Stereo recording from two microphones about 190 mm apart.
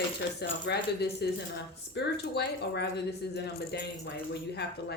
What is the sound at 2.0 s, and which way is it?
Speech, 60° left (ahead or behind).